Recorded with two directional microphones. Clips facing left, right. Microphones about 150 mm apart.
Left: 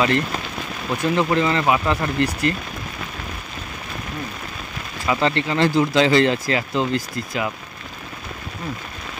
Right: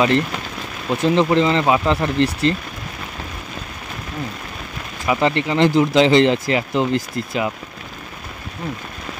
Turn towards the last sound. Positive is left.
turn(degrees=-20)  # may be behind; listen again after turning